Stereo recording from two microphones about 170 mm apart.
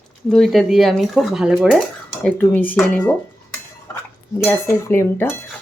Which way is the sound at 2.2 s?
10° left (ahead or behind).